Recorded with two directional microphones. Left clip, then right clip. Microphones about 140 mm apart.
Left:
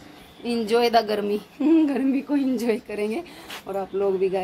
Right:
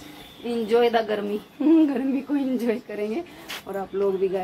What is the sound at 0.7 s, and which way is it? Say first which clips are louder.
Speech: left 1 dB; 20° left (ahead or behind).